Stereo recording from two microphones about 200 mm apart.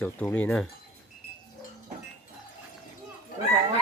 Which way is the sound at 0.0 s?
5° left (ahead or behind).